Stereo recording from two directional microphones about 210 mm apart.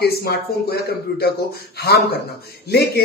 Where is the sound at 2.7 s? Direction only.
50° left (ahead or behind).